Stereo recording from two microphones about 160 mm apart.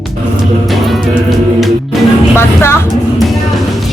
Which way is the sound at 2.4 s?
15° left (ahead or behind).